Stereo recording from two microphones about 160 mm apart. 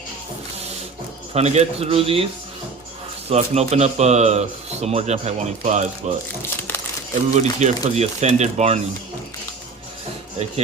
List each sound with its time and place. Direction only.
1.3 s a man's voice: 40° right (ahead or behind)
3.2 s speech: 40° right (ahead or behind)
7.3 s speech: 45° right (ahead or behind)